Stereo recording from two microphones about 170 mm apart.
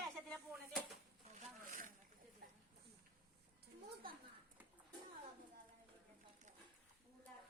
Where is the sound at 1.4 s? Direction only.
50° right (ahead or behind).